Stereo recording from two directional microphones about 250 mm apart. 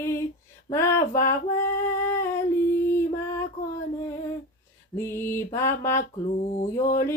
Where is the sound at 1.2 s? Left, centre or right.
Centre.